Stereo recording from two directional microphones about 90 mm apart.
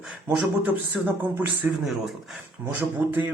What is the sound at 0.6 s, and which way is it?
Speech, 20° right (ahead or behind).